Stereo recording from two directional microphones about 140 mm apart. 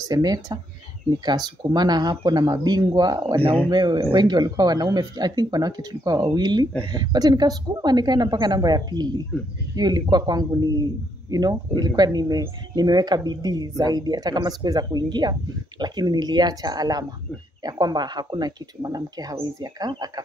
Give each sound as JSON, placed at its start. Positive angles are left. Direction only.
{"t": 0.0, "sound": "speech", "side_deg": -30}